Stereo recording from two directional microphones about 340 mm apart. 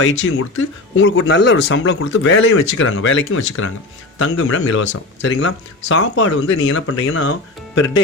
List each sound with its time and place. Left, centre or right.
0.0 s speech: left